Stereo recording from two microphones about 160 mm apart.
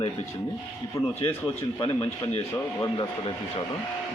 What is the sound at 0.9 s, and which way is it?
Speech, 15° left (ahead or behind).